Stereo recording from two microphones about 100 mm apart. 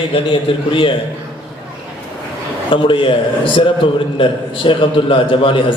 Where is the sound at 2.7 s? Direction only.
60° left (ahead or behind).